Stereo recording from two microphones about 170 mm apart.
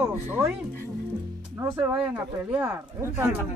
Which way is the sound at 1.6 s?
15° right (ahead or behind).